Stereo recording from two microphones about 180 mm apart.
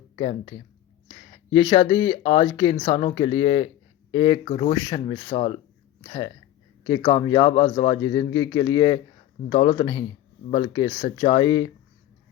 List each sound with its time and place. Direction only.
0.2 s speech: 30° left (ahead or behind)
1.5 s speech: 30° left (ahead or behind)